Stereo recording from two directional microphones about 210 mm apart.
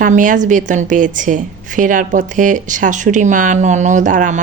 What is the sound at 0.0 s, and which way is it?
A woman's voice, 40° right (ahead or behind).